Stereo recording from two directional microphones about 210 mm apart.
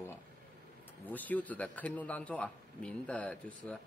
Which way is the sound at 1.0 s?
10° left (ahead or behind).